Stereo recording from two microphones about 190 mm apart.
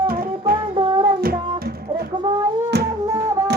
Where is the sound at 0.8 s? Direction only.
25° right (ahead or behind).